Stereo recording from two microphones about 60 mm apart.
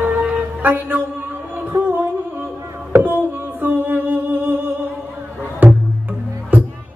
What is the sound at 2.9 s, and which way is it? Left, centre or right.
Music, right.